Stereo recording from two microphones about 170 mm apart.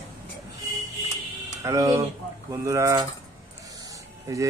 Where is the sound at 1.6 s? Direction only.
20° right (ahead or behind).